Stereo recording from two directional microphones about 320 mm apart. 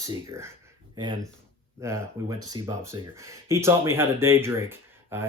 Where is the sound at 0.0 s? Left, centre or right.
Centre.